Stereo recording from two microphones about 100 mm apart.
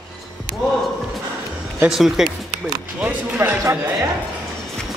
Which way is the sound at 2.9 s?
15° right (ahead or behind).